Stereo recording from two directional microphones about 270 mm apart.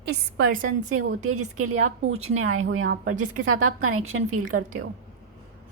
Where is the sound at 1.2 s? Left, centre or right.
Right.